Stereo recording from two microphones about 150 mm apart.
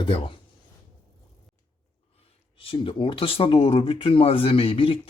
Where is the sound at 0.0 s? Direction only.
35° left (ahead or behind).